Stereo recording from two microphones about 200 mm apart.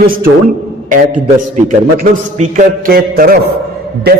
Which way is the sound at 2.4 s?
40° right (ahead or behind).